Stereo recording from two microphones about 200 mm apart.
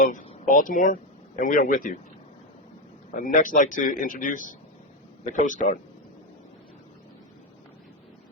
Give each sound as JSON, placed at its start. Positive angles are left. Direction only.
{"t": 0.0, "sound": "a man's voice", "side_deg": 40}
{"t": 3.2, "sound": "a man's voice", "side_deg": 40}